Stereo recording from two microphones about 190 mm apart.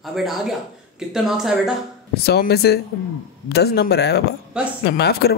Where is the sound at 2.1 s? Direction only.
55° left (ahead or behind).